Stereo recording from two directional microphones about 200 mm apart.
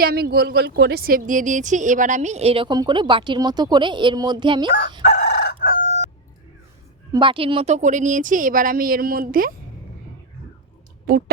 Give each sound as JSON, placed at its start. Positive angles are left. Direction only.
{"t": 0.0, "sound": "a woman's voice", "side_deg": -50}
{"t": 5.0, "sound": "chicken", "side_deg": 55}
{"t": 7.1, "sound": "a woman's voice", "side_deg": -25}
{"t": 11.1, "sound": "speech", "side_deg": -50}